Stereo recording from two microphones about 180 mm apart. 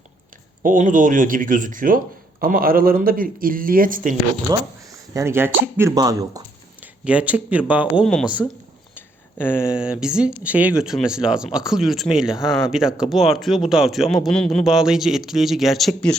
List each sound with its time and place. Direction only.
0.6 s speech: 45° right (ahead or behind)
4.5 s speech: 20° right (ahead or behind)
7.0 s speech: 5° right (ahead or behind)
8.0 s speech: centre (ahead or behind)
9.0 s a sound: 10° left (ahead or behind)
9.7 s speech: 5° right (ahead or behind)